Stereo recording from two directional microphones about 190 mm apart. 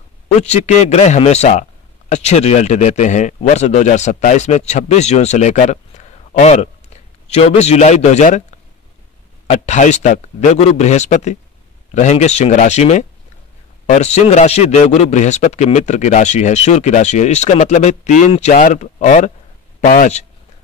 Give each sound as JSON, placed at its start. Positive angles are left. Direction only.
{"t": 0.4, "sound": "a man's voice", "side_deg": 35}